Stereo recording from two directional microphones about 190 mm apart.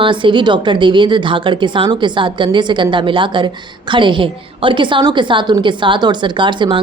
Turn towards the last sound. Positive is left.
turn(degrees=-25)  # may be behind; listen again after turning